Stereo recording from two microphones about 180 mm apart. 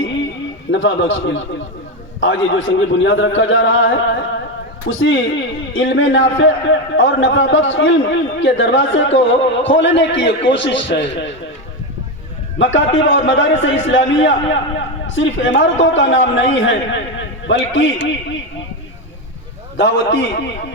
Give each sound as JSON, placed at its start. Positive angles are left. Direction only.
{"t": 0.7, "sound": "a man's voice", "side_deg": 90}
{"t": 12.5, "sound": "a man's voice", "side_deg": 90}
{"t": 19.7, "sound": "a man's voice", "side_deg": 85}